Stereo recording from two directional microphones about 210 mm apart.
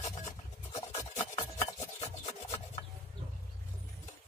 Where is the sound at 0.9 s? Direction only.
30° left (ahead or behind).